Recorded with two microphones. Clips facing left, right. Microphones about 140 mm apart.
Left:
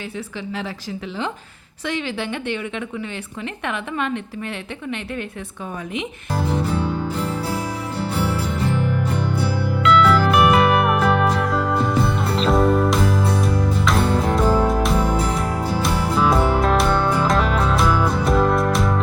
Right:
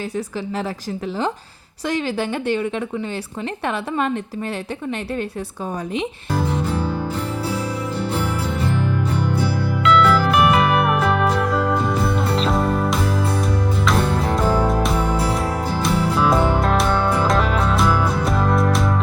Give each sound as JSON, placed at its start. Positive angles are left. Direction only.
{"t": 1.9, "sound": "a woman's voice", "side_deg": -40}
{"t": 9.8, "sound": "music", "side_deg": 0}